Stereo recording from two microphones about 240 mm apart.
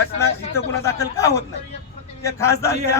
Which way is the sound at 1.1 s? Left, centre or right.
Centre.